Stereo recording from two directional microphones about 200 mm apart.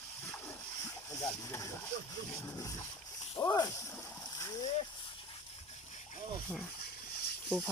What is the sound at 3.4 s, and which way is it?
Speech, 15° left (ahead or behind).